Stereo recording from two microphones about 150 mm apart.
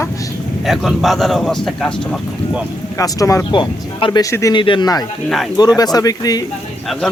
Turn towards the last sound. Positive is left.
turn(degrees=0)  # may be behind; listen again after turning